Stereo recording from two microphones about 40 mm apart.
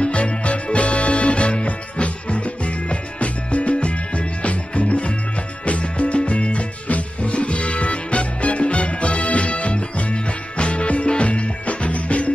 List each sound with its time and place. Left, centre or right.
0.0 s music: left